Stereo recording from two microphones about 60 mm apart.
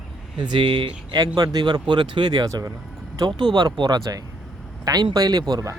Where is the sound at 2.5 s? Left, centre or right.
Right.